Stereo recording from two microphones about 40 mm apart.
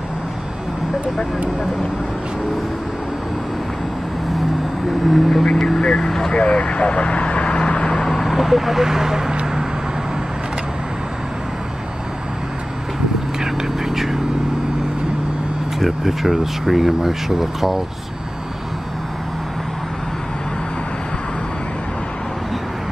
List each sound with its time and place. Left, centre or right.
5.0 s vehicle: centre
5.8 s vehicle: centre
6.3 s vehicle: left
8.1 s speech: centre
13.4 s vehicle: centre
15.8 s speech: centre